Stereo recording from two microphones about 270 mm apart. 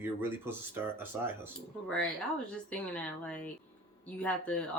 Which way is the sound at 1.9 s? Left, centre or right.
Centre.